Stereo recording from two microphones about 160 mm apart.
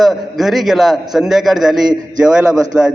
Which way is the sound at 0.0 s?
Centre (ahead or behind).